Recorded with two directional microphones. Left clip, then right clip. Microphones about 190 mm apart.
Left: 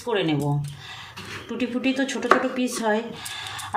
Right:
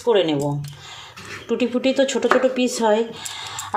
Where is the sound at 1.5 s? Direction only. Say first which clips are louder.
Right 6 dB; 30° right (ahead or behind).